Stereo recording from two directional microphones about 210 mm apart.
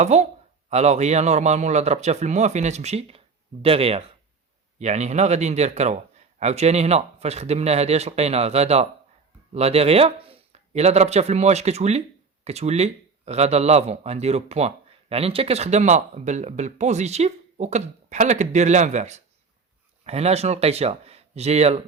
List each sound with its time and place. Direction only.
0.0 s speech: 30° right (ahead or behind)